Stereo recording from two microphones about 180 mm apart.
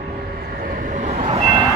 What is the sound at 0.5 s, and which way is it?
Vehicle, 50° right (ahead or behind).